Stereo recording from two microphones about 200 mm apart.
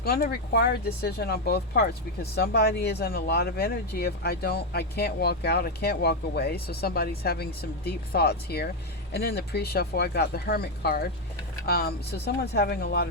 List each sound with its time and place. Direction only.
0.0 s speech: 50° left (ahead or behind)